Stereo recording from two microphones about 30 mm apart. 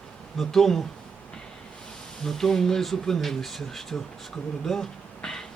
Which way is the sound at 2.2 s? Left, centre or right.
Centre.